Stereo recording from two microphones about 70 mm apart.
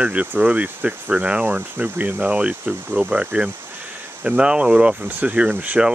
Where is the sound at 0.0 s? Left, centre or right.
Centre.